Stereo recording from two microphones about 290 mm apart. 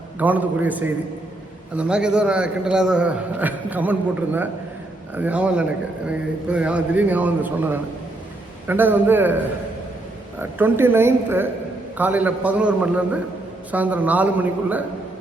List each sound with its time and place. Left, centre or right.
0.2 s a man's voice: centre
10.6 s a woman's voice: centre